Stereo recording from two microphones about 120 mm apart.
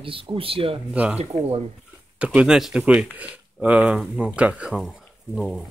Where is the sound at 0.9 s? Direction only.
10° right (ahead or behind).